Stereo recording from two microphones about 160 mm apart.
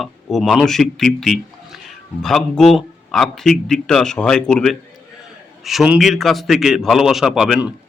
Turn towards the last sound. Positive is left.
turn(degrees=-5)  # may be behind; listen again after turning